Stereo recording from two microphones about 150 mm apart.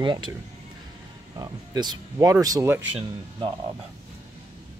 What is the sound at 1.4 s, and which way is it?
Speech, 25° right (ahead or behind).